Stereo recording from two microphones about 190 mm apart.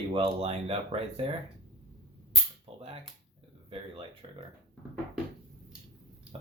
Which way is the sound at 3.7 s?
30° right (ahead or behind).